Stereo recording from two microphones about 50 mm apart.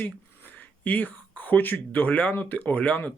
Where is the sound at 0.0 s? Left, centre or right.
Left.